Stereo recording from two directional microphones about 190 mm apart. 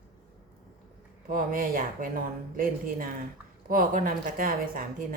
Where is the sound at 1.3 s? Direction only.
45° right (ahead or behind).